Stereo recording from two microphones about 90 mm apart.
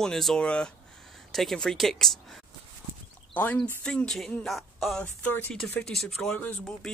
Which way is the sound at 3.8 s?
10° left (ahead or behind).